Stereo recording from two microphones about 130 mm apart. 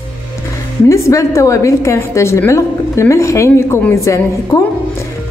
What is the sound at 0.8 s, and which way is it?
A woman's voice, 25° left (ahead or behind).